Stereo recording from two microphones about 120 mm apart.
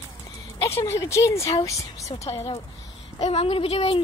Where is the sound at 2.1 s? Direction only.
50° left (ahead or behind).